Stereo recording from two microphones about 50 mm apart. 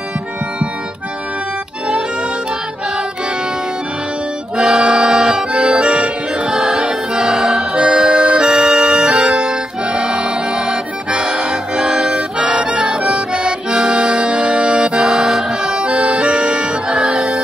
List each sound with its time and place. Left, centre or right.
4.6 s accordion: centre